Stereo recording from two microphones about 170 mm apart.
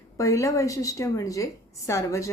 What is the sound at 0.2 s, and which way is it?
A woman's voice, 20° left (ahead or behind).